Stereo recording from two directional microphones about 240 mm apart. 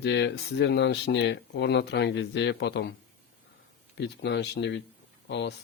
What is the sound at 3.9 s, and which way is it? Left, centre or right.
Speech, left.